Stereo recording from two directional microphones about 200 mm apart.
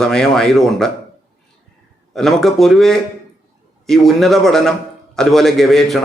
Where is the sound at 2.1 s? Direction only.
Centre (ahead or behind).